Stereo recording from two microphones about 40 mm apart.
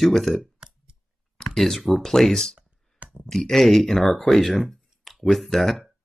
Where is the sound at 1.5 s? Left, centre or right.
Centre.